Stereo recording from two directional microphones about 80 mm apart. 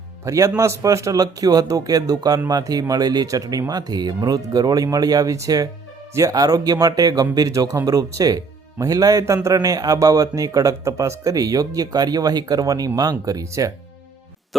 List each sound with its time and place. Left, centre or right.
0.3 s speech: right